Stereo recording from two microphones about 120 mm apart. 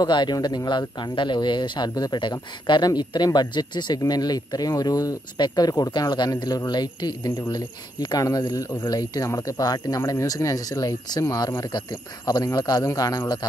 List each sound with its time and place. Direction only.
0.0 s speech: 35° left (ahead or behind)